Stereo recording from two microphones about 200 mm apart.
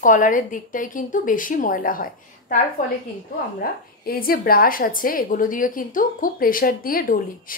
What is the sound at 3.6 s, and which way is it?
Speech, 45° left (ahead or behind).